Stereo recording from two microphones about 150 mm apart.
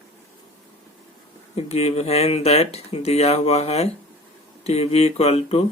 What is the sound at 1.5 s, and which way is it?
Speech, 45° left (ahead or behind).